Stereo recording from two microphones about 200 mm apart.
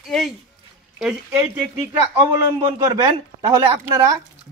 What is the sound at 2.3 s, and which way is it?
Speech, 20° right (ahead or behind).